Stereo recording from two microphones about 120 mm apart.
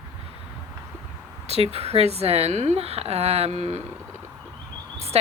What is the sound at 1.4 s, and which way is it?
Speech, 55° right (ahead or behind).